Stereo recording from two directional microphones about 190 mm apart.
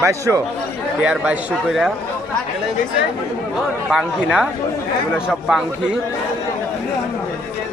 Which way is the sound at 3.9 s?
5° right (ahead or behind).